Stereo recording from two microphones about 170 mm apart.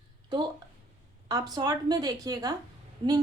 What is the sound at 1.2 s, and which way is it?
A woman's voice, 25° right (ahead or behind).